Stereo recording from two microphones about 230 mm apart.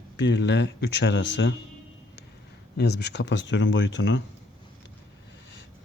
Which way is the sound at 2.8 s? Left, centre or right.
Left.